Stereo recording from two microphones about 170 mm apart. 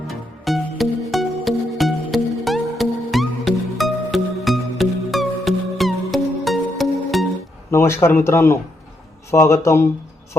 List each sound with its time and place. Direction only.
0.1 s music: centre (ahead or behind)
7.7 s speech: 15° left (ahead or behind)